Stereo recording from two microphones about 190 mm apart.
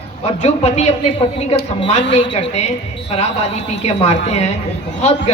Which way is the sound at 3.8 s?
35° left (ahead or behind).